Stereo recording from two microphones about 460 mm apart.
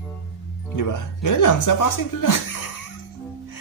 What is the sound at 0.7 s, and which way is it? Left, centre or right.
A man's voice, left.